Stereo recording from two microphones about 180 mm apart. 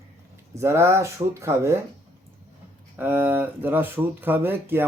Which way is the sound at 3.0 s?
10° right (ahead or behind).